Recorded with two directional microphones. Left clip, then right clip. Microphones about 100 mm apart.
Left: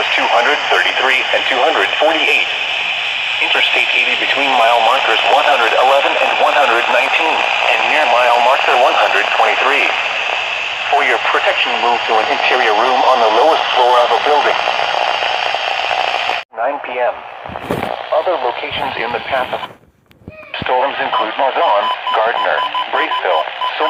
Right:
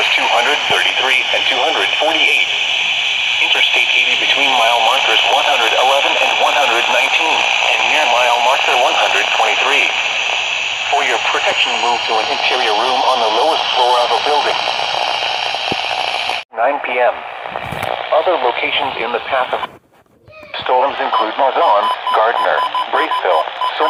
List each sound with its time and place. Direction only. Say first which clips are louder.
0.0 s speech: even; 35° left (ahead or behind)
3.4 s speech: left 1 dB; 40° left (ahead or behind)
10.9 s speech: left 3 dB; 40° left (ahead or behind)
14.1 s radio: left 2 dB; 50° left (ahead or behind)
16.6 s speech: right 6 dB; 25° right (ahead or behind)
18.1 s speech: right 2 dB; 10° right (ahead or behind)
20.7 s speech: right 1 dB; 20° right (ahead or behind)